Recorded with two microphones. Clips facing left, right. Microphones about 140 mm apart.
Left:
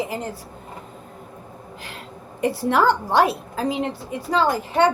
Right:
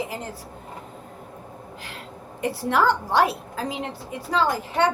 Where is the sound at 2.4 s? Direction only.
25° left (ahead or behind).